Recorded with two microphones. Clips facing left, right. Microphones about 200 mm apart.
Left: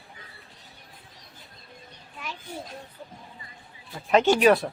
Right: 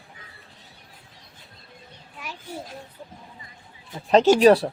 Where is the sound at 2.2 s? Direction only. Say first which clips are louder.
Right 1 dB; 10° right (ahead or behind).